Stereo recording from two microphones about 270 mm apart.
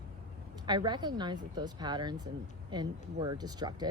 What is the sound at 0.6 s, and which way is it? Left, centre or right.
A woman's voice, centre.